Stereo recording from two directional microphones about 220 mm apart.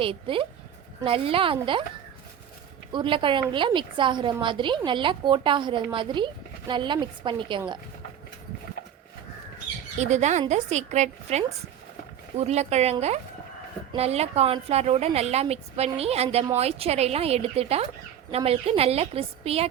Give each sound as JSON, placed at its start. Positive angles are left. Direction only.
{"t": 0.0, "sound": "speech", "side_deg": -25}
{"t": 2.9, "sound": "speech", "side_deg": -20}
{"t": 10.0, "sound": "a woman's voice", "side_deg": -30}